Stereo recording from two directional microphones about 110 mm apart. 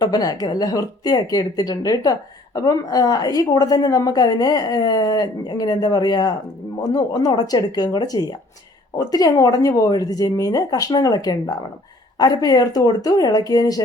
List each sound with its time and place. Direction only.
0.0 s a woman's voice: 35° left (ahead or behind)